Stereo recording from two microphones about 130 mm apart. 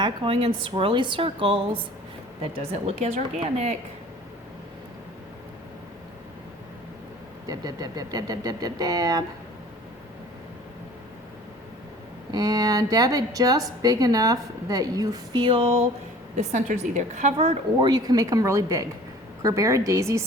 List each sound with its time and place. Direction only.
0.0 s a woman's voice: 40° right (ahead or behind)
2.4 s a woman's voice: 55° right (ahead or behind)
7.4 s a woman's voice: 30° right (ahead or behind)
12.3 s a woman's voice: 30° right (ahead or behind); by 15.9 s 45° right (ahead or behind)
16.3 s a woman's voice: 60° right (ahead or behind)
17.7 s a woman's voice: 30° right (ahead or behind)